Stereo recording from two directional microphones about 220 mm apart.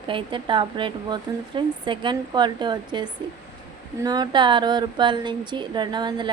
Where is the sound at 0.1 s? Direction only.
20° right (ahead or behind).